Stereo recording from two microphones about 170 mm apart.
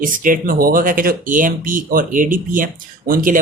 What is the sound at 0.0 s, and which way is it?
A man's voice, 55° right (ahead or behind).